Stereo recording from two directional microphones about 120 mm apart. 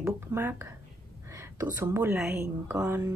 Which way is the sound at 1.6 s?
25° right (ahead or behind).